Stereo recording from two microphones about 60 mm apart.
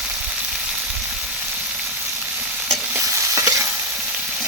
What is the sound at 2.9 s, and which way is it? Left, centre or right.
Stir, right.